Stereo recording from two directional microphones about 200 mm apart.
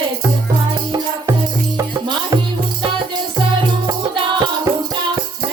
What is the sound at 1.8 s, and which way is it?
Music, 20° right (ahead or behind).